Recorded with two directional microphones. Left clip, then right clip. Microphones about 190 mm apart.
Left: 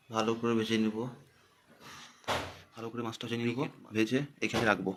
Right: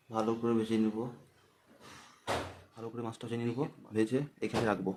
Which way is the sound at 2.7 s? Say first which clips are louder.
Left 4 dB; 5° right (ahead or behind).